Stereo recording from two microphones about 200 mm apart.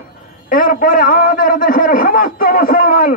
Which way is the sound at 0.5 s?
45° left (ahead or behind).